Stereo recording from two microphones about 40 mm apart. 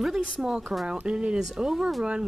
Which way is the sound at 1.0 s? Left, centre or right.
Right.